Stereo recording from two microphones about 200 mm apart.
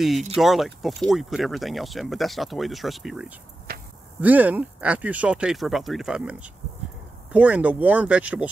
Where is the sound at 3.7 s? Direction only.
50° right (ahead or behind).